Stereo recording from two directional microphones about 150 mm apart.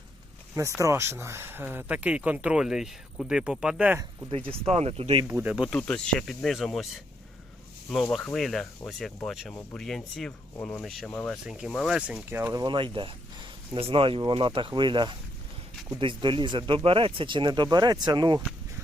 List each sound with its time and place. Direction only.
0.5 s speech: 20° right (ahead or behind)
4.4 s speech: 40° right (ahead or behind)
5.3 s speech: 10° right (ahead or behind); by 11.3 s 10° left (ahead or behind)
11.4 s speech: 5° right (ahead or behind)
12.6 s speech: 35° right (ahead or behind)